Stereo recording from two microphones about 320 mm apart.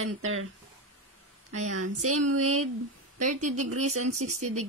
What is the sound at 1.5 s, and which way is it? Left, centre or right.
A woman's voice, right.